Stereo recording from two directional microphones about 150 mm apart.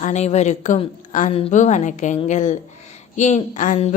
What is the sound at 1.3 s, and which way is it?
A woman's voice, 40° left (ahead or behind).